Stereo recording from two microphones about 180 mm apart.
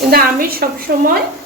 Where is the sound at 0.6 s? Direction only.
60° right (ahead or behind).